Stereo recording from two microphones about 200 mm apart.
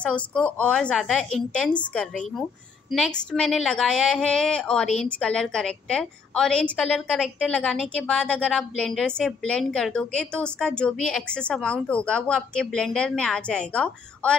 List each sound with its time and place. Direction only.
0.0 s a woman's voice: 5° left (ahead or behind)
2.9 s a woman's voice: 5° left (ahead or behind)